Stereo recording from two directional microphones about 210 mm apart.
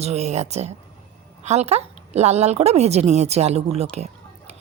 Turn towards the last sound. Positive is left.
turn(degrees=-30)  # may be behind; listen again after turning